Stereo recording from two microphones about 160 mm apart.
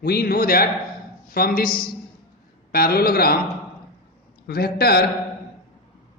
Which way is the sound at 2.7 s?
70° left (ahead or behind).